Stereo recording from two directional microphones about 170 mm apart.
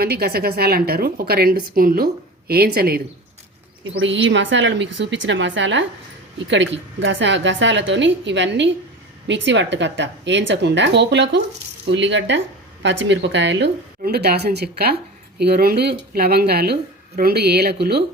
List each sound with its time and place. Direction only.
0.0 s a woman's voice: 70° right (ahead or behind)
3.8 s a woman's voice: 90° right; by 18.0 s 70° right (ahead or behind)